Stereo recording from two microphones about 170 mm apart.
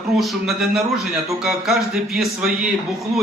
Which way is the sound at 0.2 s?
Centre (ahead or behind).